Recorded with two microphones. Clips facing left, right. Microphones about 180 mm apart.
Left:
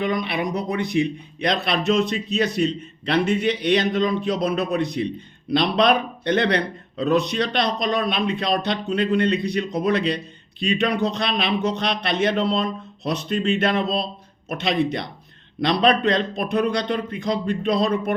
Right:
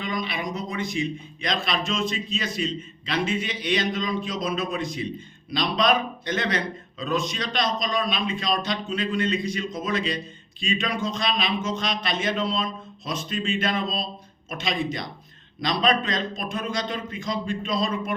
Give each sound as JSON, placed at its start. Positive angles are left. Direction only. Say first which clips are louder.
{"t": 0.0, "sound": "speech", "louder": "left 6 dB", "side_deg": 60}